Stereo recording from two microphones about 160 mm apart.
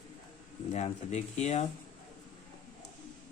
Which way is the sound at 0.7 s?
45° left (ahead or behind).